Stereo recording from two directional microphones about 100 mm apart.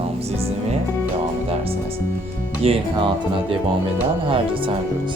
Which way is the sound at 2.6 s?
65° right (ahead or behind).